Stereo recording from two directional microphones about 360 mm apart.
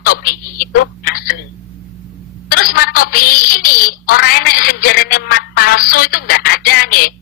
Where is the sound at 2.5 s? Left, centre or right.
Left.